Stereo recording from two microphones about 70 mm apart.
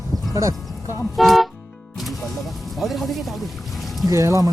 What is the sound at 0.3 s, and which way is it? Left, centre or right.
Music, right.